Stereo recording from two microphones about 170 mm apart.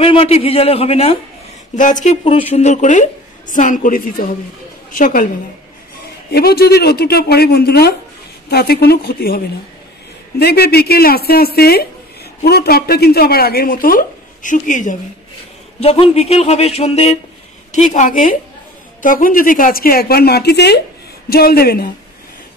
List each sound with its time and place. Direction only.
0.0 s speech: 35° left (ahead or behind)
1.8 s a woman's voice: 45° left (ahead or behind)
6.3 s speech: 65° left (ahead or behind)
10.4 s speech: 70° left (ahead or behind); by 15.0 s 50° left (ahead or behind)
15.8 s a woman's voice: 35° left (ahead or behind); by 20.8 s 75° left (ahead or behind)
21.3 s speech: 65° left (ahead or behind)